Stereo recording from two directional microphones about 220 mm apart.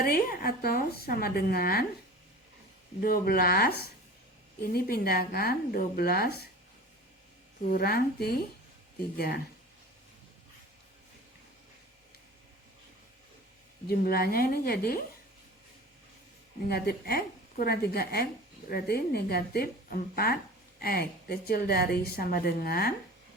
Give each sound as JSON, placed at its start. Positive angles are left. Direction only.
{"t": 0.0, "sound": "a woman's voice", "side_deg": 40}
{"t": 3.0, "sound": "a woman's voice", "side_deg": 40}
{"t": 7.7, "sound": "a woman's voice", "side_deg": 45}
{"t": 13.8, "sound": "a woman's voice", "side_deg": 45}
{"t": 16.6, "sound": "a woman's voice", "side_deg": 45}